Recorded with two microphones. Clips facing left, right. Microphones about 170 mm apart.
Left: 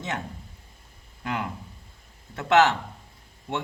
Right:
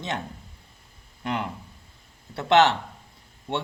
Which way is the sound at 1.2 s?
30° right (ahead or behind).